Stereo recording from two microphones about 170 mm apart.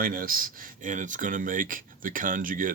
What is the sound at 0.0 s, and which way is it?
Speech, 55° right (ahead or behind).